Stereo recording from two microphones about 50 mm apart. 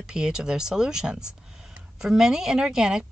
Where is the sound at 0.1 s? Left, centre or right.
Centre.